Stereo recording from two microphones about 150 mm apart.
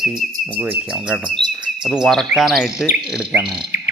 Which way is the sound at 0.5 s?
10° right (ahead or behind).